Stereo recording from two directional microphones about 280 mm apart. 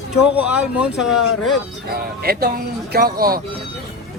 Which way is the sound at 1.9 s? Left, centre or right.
Right.